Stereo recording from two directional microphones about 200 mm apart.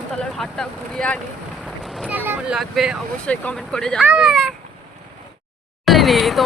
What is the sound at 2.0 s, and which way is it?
Speech, 10° right (ahead or behind).